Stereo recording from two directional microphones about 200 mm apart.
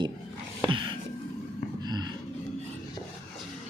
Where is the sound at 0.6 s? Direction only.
25° right (ahead or behind).